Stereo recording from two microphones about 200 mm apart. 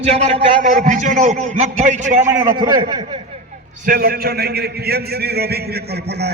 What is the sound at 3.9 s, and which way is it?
A man's voice, 50° right (ahead or behind).